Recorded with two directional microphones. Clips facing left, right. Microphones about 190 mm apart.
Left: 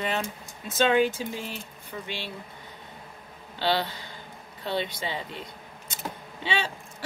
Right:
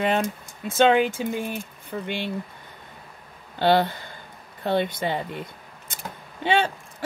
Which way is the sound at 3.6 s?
50° right (ahead or behind).